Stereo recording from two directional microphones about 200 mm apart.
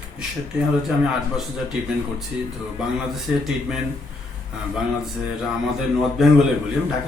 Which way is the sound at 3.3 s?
5° right (ahead or behind).